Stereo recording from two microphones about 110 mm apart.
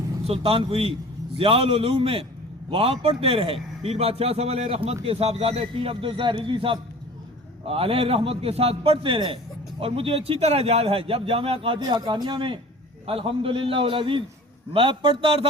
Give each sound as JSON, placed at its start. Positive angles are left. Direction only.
{"t": 0.3, "sound": "a man's voice", "side_deg": -55}
{"t": 11.8, "sound": "a man's voice", "side_deg": -40}
{"t": 13.1, "sound": "a man's voice", "side_deg": -55}